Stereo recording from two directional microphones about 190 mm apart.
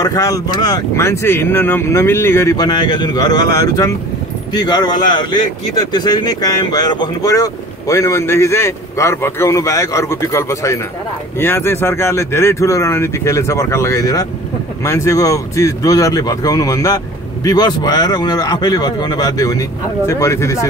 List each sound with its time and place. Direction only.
0.0 s a man's voice: 15° left (ahead or behind)